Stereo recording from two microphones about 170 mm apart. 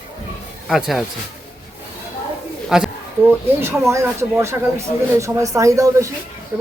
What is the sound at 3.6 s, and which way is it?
Speech, 15° right (ahead or behind).